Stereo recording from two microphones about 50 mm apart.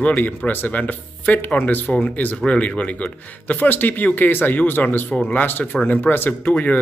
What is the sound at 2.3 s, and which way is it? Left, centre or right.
Speech, left.